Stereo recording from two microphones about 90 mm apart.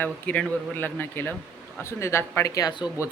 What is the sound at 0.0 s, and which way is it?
Speech, 20° left (ahead or behind).